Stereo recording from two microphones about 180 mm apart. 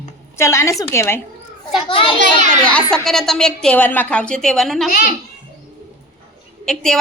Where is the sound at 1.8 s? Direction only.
30° left (ahead or behind).